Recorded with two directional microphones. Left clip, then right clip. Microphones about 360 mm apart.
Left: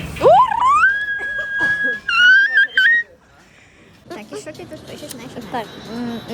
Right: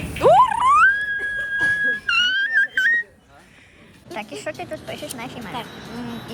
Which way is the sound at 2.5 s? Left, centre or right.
Centre.